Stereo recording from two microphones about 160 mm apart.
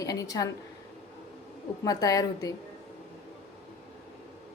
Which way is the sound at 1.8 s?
25° left (ahead or behind).